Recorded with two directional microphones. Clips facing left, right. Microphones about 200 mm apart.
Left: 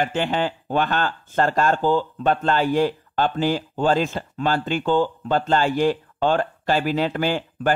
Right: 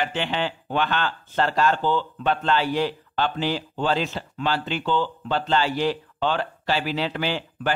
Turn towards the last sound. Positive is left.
turn(degrees=45)  # may be behind; listen again after turning